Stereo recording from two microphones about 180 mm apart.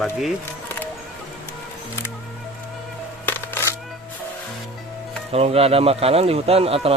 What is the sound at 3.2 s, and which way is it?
Music, 10° left (ahead or behind).